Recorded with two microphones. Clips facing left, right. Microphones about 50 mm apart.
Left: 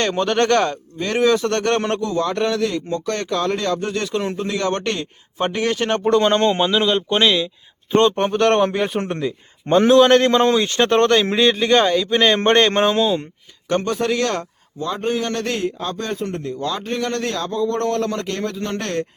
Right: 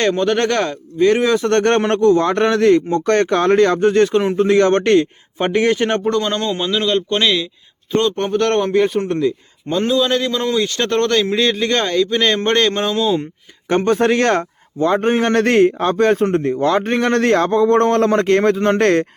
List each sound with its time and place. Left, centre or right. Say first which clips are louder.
0.0 s speech: right 2 dB; centre
0.9 s speech: right 4 dB; centre
1.5 s speech: right 5 dB; right
5.4 s speech: right 5 dB; centre
6.1 s speech: left 3 dB; left
6.6 s speech: even; centre
7.9 s speech: left 2 dB; left
8.2 s speech: even; centre
9.8 s a man's voice: left 5 dB; left
10.5 s speech: left 1 dB; left
12.5 s speech: left 1 dB; left
13.7 s a man's voice: right 5 dB; right